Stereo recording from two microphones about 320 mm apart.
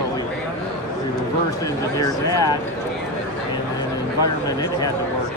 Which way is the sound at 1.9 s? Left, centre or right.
Centre.